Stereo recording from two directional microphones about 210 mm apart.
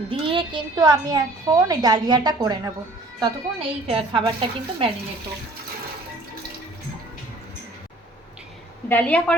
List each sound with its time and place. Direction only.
0.1 s a woman's voice: 25° right (ahead or behind)
8.9 s a woman's voice: 5° left (ahead or behind)